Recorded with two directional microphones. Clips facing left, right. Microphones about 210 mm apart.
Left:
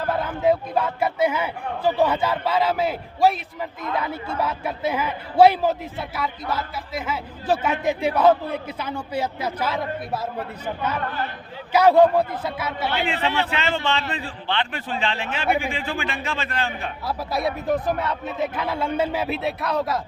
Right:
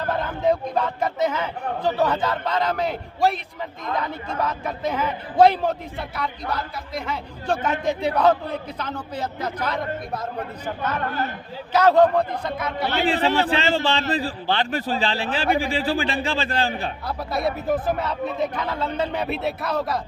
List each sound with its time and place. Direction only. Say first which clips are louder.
0.2 s a man's voice: left 1 dB; 5° left (ahead or behind)
11.7 s a man's voice: left 1 dB; 10° left (ahead or behind)
12.9 s a man's voice: right 5 dB; 40° right (ahead or behind)
17.1 s speech: left 1 dB; centre (ahead or behind)